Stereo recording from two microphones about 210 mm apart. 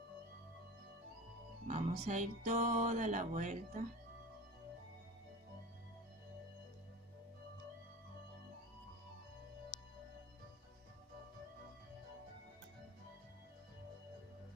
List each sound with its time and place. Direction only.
1.7 s music: 35° right (ahead or behind)